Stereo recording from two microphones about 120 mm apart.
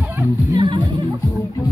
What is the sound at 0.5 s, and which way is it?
Music, 40° right (ahead or behind).